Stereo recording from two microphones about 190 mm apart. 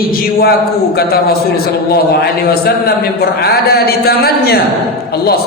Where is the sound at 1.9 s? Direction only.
55° left (ahead or behind).